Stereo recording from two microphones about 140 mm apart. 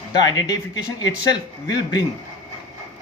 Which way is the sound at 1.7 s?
25° left (ahead or behind).